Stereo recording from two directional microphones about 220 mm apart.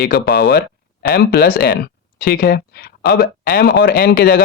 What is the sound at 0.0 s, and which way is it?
Speech, 50° left (ahead or behind).